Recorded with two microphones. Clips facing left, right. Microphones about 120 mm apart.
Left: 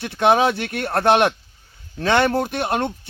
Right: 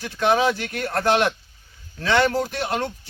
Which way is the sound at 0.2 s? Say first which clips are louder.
Left 3 dB; 55° left (ahead or behind).